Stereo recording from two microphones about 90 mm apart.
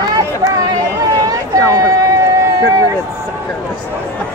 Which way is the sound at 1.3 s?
40° right (ahead or behind).